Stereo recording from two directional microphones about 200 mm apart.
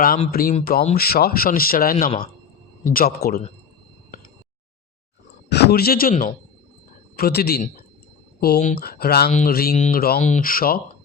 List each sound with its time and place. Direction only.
0.3 s speech: 50° left (ahead or behind)
5.5 s speech: 55° left (ahead or behind)
9.7 s speech: 35° left (ahead or behind)